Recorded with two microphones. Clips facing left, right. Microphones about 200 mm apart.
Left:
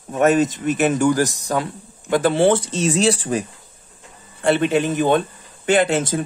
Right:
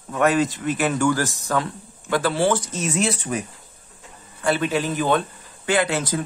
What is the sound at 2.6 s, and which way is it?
Speech, 30° left (ahead or behind).